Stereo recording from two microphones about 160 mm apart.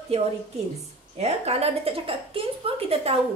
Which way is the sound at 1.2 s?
40° right (ahead or behind).